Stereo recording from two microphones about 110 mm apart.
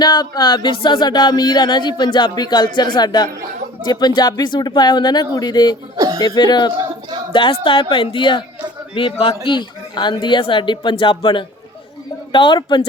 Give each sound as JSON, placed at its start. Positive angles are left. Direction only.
{"t": 0.0, "sound": "music", "side_deg": 40}
{"t": 7.3, "sound": "speech", "side_deg": 50}